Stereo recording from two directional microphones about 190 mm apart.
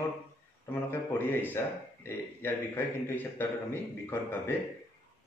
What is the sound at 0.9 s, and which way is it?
A man's voice, 10° left (ahead or behind).